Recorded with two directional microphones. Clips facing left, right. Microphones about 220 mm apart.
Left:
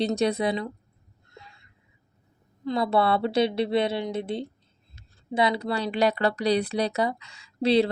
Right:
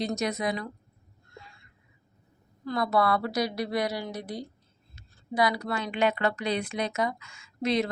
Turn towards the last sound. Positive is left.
turn(degrees=30)  # may be behind; listen again after turning